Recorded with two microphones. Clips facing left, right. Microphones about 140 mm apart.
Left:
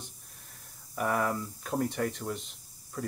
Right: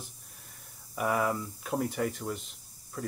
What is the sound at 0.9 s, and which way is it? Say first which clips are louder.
Speech: right 1 dB; 5° right (ahead or behind).